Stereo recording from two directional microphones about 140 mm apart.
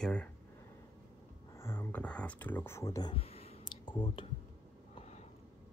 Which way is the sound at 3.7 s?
35° left (ahead or behind).